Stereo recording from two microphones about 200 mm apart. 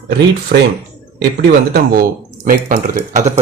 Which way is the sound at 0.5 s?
55° right (ahead or behind).